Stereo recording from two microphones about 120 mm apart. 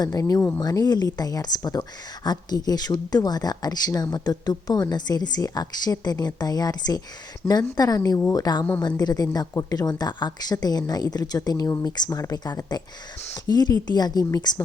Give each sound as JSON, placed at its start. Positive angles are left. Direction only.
{"t": 0.0, "sound": "speech", "side_deg": 30}